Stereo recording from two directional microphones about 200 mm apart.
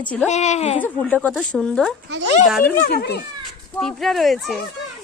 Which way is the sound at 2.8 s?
50° left (ahead or behind).